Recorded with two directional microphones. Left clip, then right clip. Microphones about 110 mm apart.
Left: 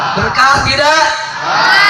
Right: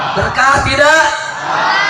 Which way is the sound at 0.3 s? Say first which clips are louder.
Even; 25° right (ahead or behind).